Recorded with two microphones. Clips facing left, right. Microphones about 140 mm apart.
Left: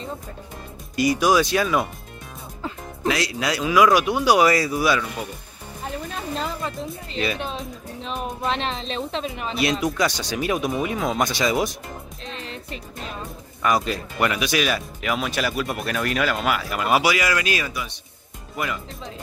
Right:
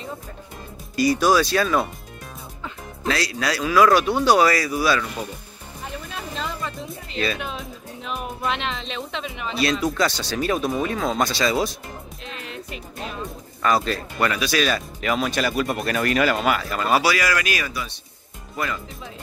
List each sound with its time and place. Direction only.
0.9 s speech: 15° left (ahead or behind)
3.1 s speech: 20° left (ahead or behind)
6.3 s music: 40° left (ahead or behind)
7.3 s speech: 30° left (ahead or behind)
9.6 s speech: 15° left (ahead or behind)
12.4 s music: 35° left (ahead or behind)
13.6 s speech: 15° left (ahead or behind)
16.6 s speech: 15° left (ahead or behind)